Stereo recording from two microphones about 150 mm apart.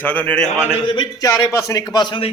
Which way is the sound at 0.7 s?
35° left (ahead or behind).